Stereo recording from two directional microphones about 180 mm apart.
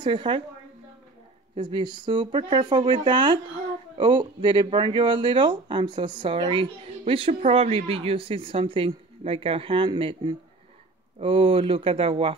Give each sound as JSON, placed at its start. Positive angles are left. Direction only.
{"t": 0.0, "sound": "speech", "side_deg": -25}
{"t": 1.5, "sound": "speech", "side_deg": -25}